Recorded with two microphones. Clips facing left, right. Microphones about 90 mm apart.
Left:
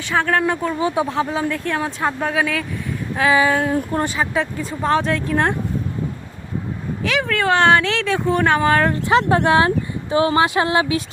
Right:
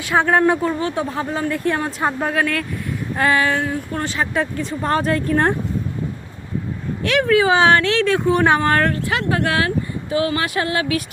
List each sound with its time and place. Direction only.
0.2 s speech: 15° right (ahead or behind)
0.8 s female singing: 15° left (ahead or behind)
1.0 s speech: 5° left (ahead or behind)
1.5 s speech: 10° right (ahead or behind)
3.2 s female singing: 5° left (ahead or behind)
4.4 s speech: 5° left (ahead or behind)
7.0 s speech: centre (ahead or behind)
8.9 s speech: 25° left (ahead or behind)